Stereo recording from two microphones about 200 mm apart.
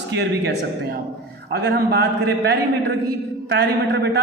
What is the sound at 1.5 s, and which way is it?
A man's voice, 55° right (ahead or behind).